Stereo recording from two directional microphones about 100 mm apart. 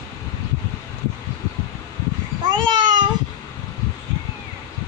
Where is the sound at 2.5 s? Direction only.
50° right (ahead or behind).